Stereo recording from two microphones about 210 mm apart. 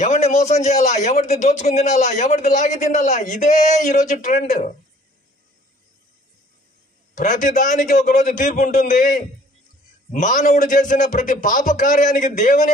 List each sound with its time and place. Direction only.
0.0 s a man's voice: 30° left (ahead or behind)
7.2 s a man's voice: 35° left (ahead or behind)